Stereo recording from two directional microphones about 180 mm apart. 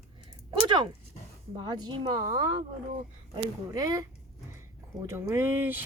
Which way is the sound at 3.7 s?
20° right (ahead or behind).